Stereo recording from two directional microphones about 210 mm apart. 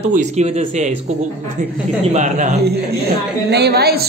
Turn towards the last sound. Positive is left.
turn(degrees=-50)  # may be behind; listen again after turning